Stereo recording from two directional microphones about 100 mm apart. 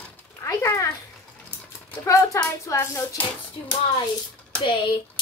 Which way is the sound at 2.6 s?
30° left (ahead or behind).